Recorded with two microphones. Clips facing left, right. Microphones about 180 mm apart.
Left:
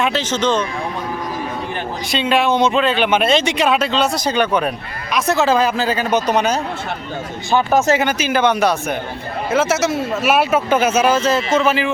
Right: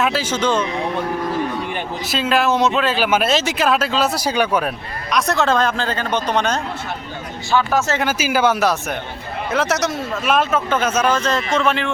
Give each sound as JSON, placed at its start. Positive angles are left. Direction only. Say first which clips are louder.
{"t": 0.0, "sound": "speech", "louder": "left 1 dB", "side_deg": -5}
{"t": 2.0, "sound": "speech", "louder": "left 1 dB", "side_deg": 0}
{"t": 5.1, "sound": "speech", "louder": "left 2 dB", "side_deg": 0}
{"t": 8.0, "sound": "speech", "louder": "left 1 dB", "side_deg": -5}